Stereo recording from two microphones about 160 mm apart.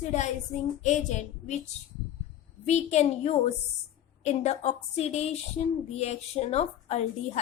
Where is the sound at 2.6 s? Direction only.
45° left (ahead or behind).